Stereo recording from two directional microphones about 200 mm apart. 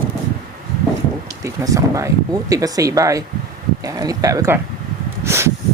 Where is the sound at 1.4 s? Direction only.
15° right (ahead or behind).